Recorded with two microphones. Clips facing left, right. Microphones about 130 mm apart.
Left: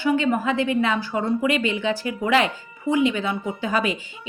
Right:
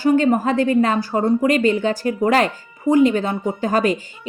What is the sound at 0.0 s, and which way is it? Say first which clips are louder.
A woman's voice: right 5 dB; 40° right (ahead or behind).